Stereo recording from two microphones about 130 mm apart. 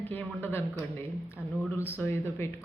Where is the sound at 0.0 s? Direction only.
15° left (ahead or behind).